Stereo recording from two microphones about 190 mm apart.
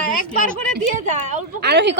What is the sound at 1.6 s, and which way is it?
Speech, 60° right (ahead or behind).